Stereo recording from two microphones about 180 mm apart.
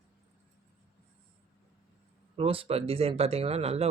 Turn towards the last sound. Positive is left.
turn(degrees=-35)  # may be behind; listen again after turning